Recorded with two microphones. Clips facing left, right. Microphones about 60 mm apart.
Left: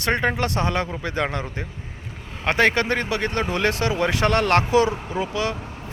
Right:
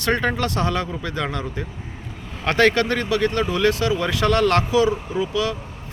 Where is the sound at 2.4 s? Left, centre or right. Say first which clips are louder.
Right 2 dB; left.